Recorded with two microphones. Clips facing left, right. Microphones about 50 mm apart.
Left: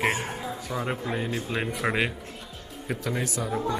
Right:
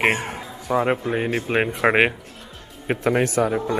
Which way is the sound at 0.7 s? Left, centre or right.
Right.